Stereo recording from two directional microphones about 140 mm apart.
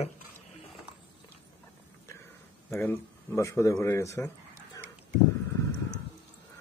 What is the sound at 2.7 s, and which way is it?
Speech, 15° left (ahead or behind).